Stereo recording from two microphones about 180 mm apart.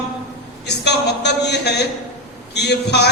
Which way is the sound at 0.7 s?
70° left (ahead or behind).